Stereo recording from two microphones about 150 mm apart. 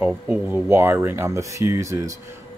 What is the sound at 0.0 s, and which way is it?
Speech, 15° right (ahead or behind).